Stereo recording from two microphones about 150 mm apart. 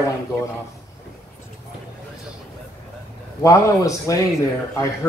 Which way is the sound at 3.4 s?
20° left (ahead or behind).